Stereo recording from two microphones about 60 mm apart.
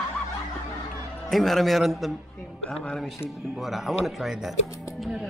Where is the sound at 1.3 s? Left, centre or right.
Centre.